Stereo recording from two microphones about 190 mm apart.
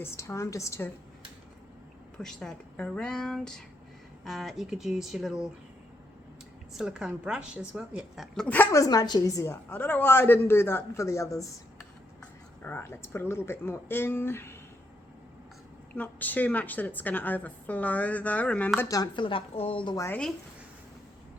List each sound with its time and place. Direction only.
0.0 s a woman's voice: 15° left (ahead or behind)
2.1 s speech: 5° left (ahead or behind)
6.7 s a woman's voice: 5° right (ahead or behind); by 11.4 s 15° left (ahead or behind)
12.6 s a woman's voice: 10° left (ahead or behind)
16.0 s a woman's voice: 10° left (ahead or behind)
20.1 s speech: 5° left (ahead or behind)